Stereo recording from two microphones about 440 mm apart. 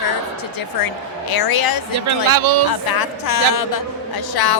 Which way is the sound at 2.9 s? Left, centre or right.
Left.